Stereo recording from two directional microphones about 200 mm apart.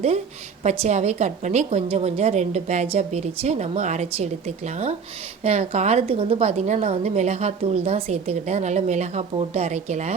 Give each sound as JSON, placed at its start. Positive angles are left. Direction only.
{"t": 0.6, "sound": "a woman's voice", "side_deg": -35}